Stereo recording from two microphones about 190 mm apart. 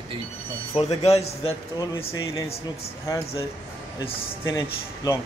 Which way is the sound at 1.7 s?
15° left (ahead or behind).